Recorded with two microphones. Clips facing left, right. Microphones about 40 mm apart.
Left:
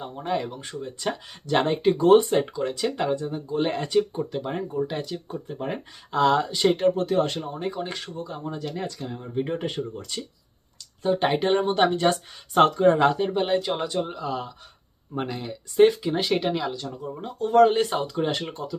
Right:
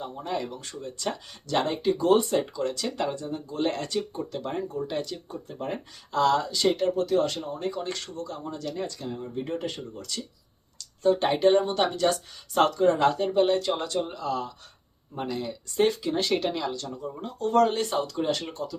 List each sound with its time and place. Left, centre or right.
0.0 s speech: left
0.4 s speech: centre
1.8 s speech: left; by 5.2 s centre
5.3 s speech: left
9.3 s speech: left
10.8 s speech: centre
15.1 s speech: left
15.4 s speech: centre